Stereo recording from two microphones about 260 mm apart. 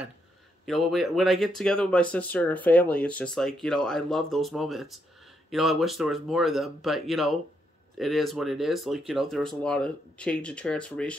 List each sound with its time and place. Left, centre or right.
0.7 s speech: centre